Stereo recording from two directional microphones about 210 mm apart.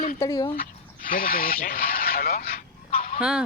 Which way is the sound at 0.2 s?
20° left (ahead or behind).